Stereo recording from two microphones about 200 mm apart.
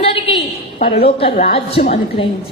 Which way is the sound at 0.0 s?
30° left (ahead or behind).